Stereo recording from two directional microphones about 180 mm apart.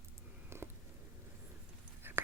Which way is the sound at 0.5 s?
15° right (ahead or behind).